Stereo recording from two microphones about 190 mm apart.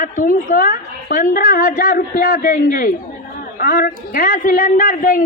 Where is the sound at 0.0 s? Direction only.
40° left (ahead or behind).